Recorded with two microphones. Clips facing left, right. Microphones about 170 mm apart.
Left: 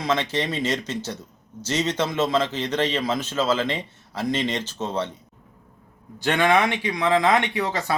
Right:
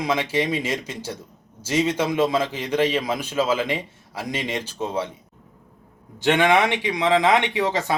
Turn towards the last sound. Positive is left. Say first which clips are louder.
# right 2 dB
turn(degrees=-15)  # may be behind; listen again after turning